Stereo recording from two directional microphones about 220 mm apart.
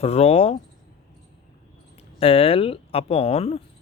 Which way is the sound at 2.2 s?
25° left (ahead or behind).